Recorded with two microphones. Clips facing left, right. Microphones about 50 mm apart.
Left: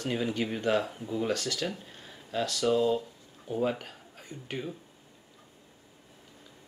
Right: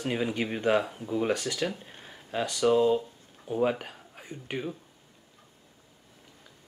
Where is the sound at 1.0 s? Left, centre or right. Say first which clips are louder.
Right 2 dB; centre.